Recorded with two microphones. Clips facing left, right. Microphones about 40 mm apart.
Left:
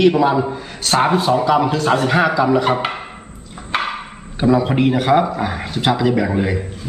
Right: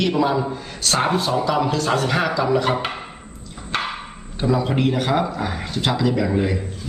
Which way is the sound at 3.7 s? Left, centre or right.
Centre.